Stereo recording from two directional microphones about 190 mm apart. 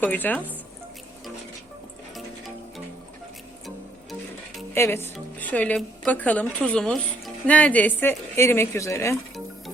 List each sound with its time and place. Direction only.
0.0 s speech: 10° left (ahead or behind)
4.7 s speech: 10° left (ahead or behind)